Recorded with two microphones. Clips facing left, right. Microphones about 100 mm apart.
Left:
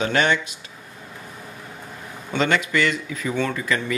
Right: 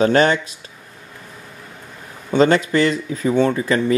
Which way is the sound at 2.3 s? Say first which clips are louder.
Right 6 dB; 35° right (ahead or behind).